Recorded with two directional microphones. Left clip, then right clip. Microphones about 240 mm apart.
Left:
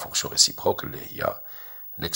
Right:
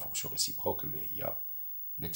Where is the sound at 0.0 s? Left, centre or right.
Centre.